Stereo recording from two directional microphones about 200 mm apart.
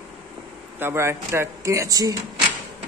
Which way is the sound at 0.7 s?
10° right (ahead or behind).